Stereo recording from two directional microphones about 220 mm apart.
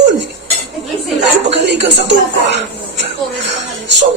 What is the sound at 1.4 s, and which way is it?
A woman's voice, 50° right (ahead or behind).